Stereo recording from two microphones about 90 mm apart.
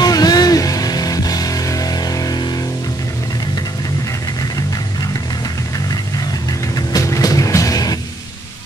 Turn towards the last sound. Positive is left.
turn(degrees=45)  # may be behind; listen again after turning